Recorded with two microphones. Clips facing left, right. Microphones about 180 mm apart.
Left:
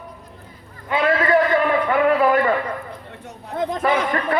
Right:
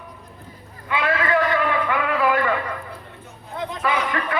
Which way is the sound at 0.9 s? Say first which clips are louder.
Left 4 dB; 40° left (ahead or behind).